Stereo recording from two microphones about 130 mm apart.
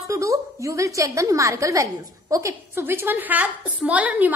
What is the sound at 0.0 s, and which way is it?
A woman's voice, 25° right (ahead or behind).